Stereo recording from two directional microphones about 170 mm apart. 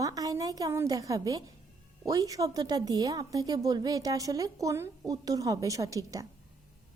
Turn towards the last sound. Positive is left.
turn(degrees=-20)  # may be behind; listen again after turning